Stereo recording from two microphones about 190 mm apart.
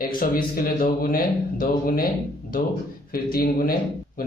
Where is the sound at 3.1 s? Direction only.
50° left (ahead or behind).